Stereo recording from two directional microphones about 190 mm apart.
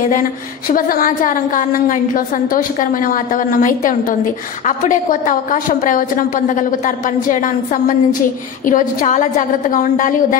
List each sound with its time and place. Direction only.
0.1 s a woman's voice: 45° left (ahead or behind)